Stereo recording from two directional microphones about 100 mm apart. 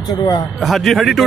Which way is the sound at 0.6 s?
Centre (ahead or behind).